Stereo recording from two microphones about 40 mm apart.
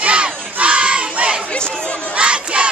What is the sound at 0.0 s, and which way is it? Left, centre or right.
Battle cry, right.